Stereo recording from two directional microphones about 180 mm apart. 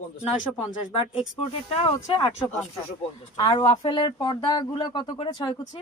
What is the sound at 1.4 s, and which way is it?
Speech, 30° left (ahead or behind).